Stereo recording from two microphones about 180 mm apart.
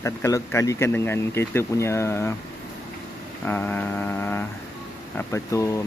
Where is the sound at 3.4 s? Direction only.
10° left (ahead or behind).